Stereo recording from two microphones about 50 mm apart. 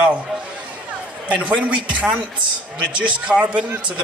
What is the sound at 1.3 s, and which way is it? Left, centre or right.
Speech, right.